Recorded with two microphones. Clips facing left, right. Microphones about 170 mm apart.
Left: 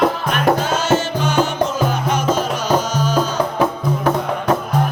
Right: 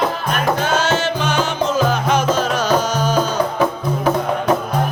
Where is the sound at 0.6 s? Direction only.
70° right (ahead or behind).